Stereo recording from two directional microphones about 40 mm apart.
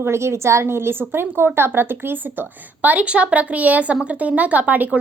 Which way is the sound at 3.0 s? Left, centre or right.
Right.